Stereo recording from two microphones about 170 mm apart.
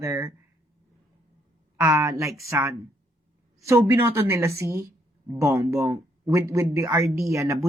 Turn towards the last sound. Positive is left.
turn(degrees=-15)  # may be behind; listen again after turning